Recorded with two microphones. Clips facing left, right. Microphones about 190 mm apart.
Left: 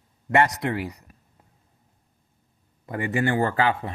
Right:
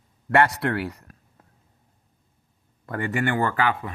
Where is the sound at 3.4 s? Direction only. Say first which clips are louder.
Left 1 dB; 35° left (ahead or behind).